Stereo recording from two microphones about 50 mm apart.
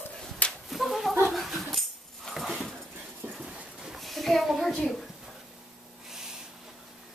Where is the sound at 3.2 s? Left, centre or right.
Right.